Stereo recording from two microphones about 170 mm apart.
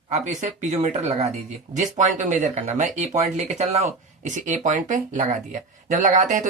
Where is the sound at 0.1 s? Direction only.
45° right (ahead or behind).